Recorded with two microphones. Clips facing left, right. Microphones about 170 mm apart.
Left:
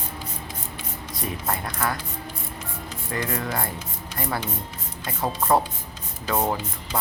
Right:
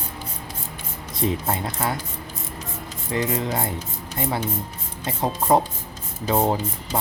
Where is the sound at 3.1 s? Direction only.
20° right (ahead or behind).